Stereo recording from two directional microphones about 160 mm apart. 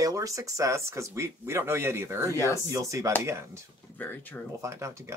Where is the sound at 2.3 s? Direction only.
20° left (ahead or behind).